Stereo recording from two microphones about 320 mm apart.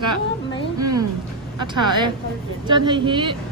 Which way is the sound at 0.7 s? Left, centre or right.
Right.